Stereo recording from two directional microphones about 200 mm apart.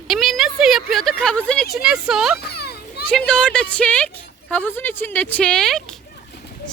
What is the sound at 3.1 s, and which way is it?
A woman's voice, 5° left (ahead or behind).